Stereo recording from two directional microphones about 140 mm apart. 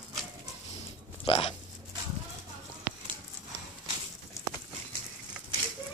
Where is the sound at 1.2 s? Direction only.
40° left (ahead or behind).